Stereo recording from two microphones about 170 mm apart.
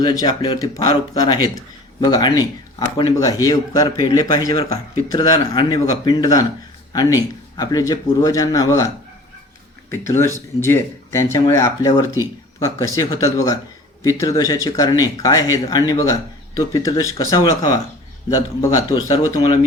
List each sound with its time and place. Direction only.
0.0 s speech: 20° left (ahead or behind)
9.9 s speech: 15° left (ahead or behind)